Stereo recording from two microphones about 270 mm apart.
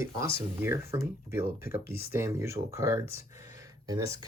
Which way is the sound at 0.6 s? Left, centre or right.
Centre.